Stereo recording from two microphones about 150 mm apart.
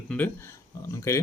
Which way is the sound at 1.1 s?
20° left (ahead or behind).